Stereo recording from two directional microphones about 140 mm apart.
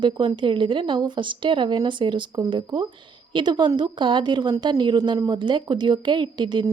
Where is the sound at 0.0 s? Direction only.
35° right (ahead or behind).